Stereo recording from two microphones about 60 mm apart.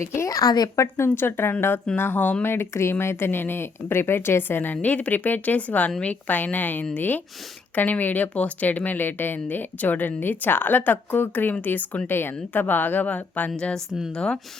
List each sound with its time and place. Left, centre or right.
0.0 s a woman's voice: left
0.3 s a woman's voice: left
0.9 s speech: left
2.5 s a woman's voice: left; by 14.3 s centre